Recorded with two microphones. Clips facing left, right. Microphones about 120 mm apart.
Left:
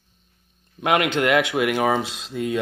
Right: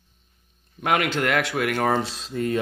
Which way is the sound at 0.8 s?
5° left (ahead or behind).